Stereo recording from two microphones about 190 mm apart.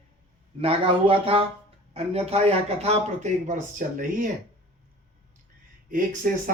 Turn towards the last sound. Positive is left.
turn(degrees=-45)  # may be behind; listen again after turning